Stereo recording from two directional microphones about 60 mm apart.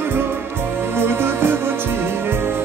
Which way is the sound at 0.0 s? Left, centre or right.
Right.